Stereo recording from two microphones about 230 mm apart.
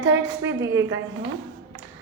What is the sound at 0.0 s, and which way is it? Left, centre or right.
Speech, right.